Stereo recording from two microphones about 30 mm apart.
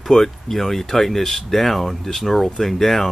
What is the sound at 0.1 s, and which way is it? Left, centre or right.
Speech, centre.